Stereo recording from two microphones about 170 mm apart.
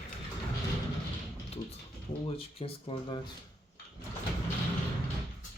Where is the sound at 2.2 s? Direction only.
35° left (ahead or behind).